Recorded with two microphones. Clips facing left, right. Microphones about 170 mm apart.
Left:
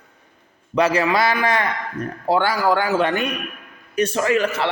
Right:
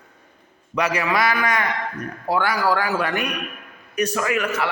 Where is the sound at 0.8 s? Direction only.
30° left (ahead or behind).